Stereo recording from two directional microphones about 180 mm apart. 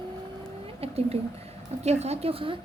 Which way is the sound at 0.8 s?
35° right (ahead or behind).